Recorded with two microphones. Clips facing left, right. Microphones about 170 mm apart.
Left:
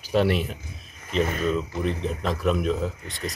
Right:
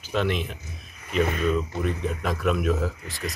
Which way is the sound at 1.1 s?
35° left (ahead or behind).